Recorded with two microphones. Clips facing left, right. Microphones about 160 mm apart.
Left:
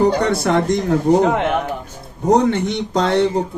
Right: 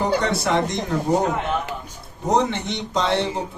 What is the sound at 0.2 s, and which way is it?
Speech, 55° left (ahead or behind).